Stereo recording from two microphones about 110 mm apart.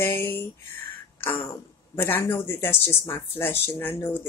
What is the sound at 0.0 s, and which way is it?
Speech, 20° left (ahead or behind).